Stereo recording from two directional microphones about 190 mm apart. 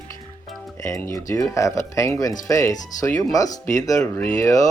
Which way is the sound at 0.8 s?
15° left (ahead or behind).